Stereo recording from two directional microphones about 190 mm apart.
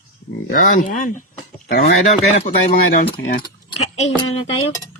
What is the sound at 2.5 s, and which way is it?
Speech, 35° left (ahead or behind).